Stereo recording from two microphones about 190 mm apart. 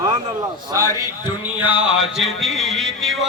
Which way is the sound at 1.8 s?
5° right (ahead or behind).